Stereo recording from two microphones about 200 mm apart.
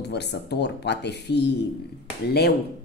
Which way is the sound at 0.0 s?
55° left (ahead or behind).